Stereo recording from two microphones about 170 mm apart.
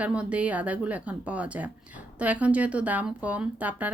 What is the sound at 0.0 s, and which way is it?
Speech, 5° right (ahead or behind).